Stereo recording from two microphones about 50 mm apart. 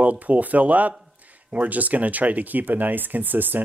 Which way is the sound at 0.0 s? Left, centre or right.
Right.